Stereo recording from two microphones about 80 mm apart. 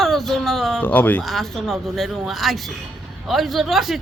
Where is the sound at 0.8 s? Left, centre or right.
Left.